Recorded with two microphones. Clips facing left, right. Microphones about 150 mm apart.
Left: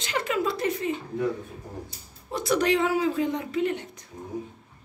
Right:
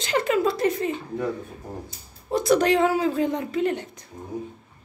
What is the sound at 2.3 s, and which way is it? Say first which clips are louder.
A woman's voice: right 4 dB; 40° right (ahead or behind).